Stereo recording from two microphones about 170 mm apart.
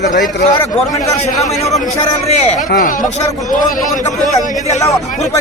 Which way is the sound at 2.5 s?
55° left (ahead or behind).